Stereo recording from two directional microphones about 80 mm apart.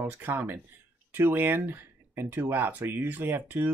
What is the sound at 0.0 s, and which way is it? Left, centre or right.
Speech, right.